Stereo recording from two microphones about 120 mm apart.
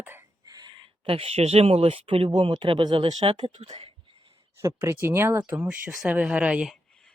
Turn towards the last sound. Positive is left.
turn(degrees=-10)  # may be behind; listen again after turning